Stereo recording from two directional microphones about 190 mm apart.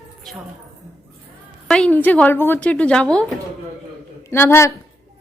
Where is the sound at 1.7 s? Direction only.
5° left (ahead or behind).